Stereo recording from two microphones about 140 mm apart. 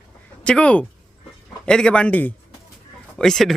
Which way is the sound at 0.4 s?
10° left (ahead or behind).